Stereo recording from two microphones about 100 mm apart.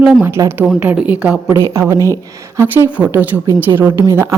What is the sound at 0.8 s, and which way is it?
Speech, 15° right (ahead or behind).